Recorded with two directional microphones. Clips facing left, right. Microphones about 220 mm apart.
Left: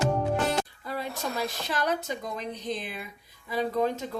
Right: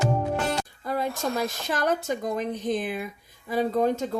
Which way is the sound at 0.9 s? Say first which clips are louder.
Right 6 dB; 45° right (ahead or behind).